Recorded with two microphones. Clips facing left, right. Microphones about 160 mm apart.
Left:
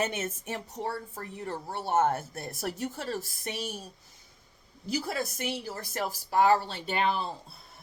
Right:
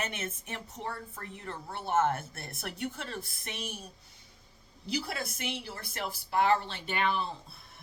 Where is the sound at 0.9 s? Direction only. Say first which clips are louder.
Left 2 dB; 35° left (ahead or behind).